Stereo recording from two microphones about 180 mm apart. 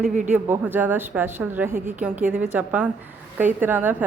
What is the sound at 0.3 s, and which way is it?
A woman's voice, 10° right (ahead or behind).